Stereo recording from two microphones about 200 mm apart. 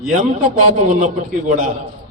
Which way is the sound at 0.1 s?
35° right (ahead or behind).